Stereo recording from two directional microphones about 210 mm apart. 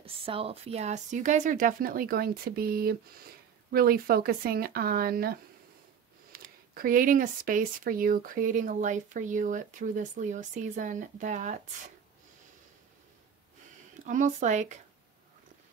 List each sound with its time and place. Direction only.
0.0 s speech: 25° right (ahead or behind)
14.0 s speech: 35° right (ahead or behind)